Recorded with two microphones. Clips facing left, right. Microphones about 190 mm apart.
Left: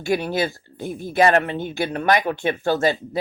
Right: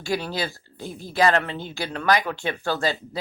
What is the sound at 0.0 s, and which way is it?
Speech, 20° left (ahead or behind).